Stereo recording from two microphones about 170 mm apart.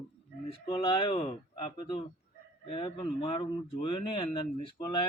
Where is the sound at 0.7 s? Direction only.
25° left (ahead or behind).